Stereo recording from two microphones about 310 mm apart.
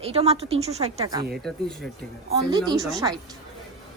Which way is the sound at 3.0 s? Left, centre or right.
Centre.